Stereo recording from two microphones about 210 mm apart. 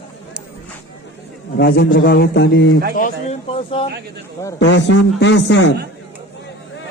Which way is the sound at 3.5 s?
25° left (ahead or behind).